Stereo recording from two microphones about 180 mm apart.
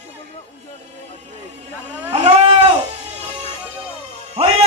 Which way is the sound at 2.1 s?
40° right (ahead or behind).